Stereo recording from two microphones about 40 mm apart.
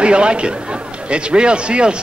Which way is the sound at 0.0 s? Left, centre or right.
Right.